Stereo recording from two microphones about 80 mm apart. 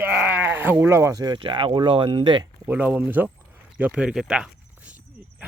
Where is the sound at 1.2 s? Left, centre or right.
Right.